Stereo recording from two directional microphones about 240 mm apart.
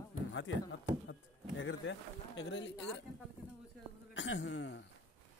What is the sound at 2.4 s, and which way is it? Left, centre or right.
Speech, left.